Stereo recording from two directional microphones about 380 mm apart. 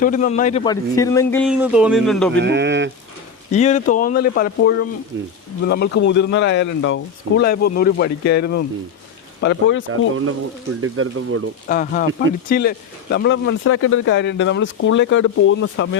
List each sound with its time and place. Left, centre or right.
0.0 s a man's voice: left; by 2.4 s centre
2.4 s speech: right
3.5 s speech: centre
5.1 s speech: right
5.6 s speech: left
10.8 s speech: right
11.7 s speech: left